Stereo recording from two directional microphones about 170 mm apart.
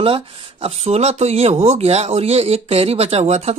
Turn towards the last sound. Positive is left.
turn(degrees=-40)  # may be behind; listen again after turning